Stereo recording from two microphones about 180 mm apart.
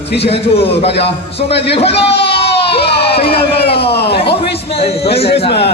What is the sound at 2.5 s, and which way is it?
Baby cry, 70° left (ahead or behind).